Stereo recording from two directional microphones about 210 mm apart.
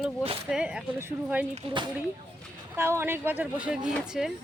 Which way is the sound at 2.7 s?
10° right (ahead or behind).